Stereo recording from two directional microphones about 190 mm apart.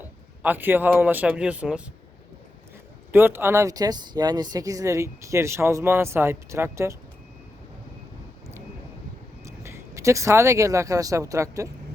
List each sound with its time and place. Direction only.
0.4 s speech: 10° right (ahead or behind)
3.1 s speech: 10° right (ahead or behind)
9.5 s speech: 15° right (ahead or behind)